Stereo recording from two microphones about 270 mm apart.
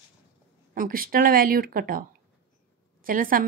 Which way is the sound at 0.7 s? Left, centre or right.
Right.